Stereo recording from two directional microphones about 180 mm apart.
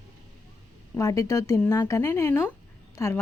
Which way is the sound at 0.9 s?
15° left (ahead or behind).